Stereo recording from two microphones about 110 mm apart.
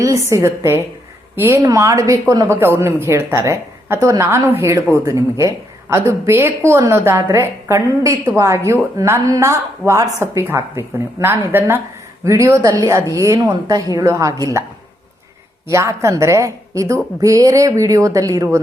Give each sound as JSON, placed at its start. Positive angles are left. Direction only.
{"t": 0.0, "sound": "a woman's voice", "side_deg": -30}
{"t": 15.6, "sound": "a woman's voice", "side_deg": -25}